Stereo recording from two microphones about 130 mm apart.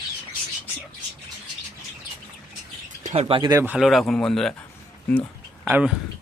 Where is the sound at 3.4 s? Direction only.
25° right (ahead or behind).